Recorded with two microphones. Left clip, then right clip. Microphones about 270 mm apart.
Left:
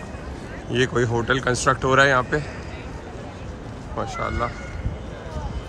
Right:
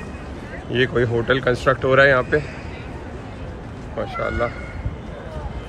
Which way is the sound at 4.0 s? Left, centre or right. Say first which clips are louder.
Right 3 dB; centre.